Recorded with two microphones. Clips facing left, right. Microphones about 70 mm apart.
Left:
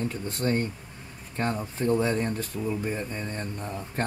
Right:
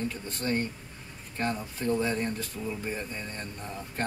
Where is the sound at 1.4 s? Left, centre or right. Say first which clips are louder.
Left 3 dB; left.